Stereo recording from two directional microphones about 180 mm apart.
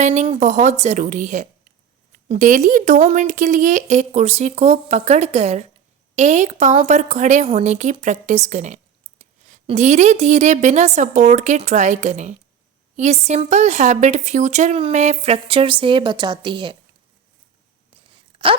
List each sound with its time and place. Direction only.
0.0 s speech: 40° right (ahead or behind)
18.1 s zipper: 30° right (ahead or behind)